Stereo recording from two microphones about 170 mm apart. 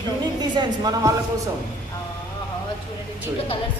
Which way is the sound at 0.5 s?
25° right (ahead or behind).